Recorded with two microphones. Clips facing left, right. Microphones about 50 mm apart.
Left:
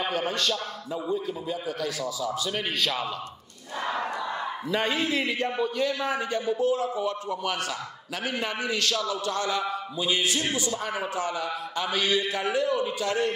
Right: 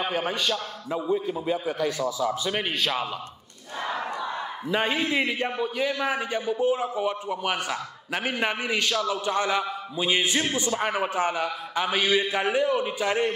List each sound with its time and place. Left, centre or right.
0.0 s a man's voice: centre; by 11.5 s right
11.7 s a man's voice: right